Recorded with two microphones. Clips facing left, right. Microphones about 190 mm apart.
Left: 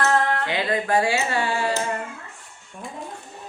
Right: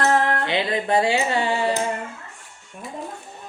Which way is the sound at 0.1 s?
20° right (ahead or behind).